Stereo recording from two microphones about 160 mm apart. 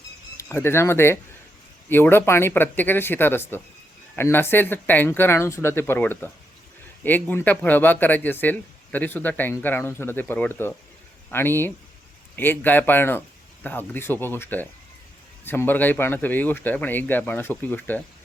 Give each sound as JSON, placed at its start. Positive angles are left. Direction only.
{"t": 0.3, "sound": "speech", "side_deg": 15}